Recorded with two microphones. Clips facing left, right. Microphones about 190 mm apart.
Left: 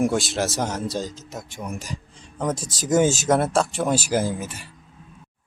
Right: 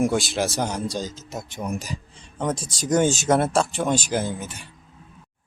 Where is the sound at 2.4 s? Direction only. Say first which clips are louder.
Even; centre (ahead or behind).